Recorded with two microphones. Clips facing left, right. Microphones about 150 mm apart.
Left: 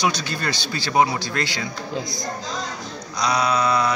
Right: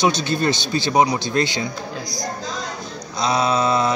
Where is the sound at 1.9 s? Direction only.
25° left (ahead or behind).